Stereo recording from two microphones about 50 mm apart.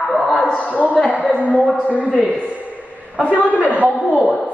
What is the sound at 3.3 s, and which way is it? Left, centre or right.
Speech, left.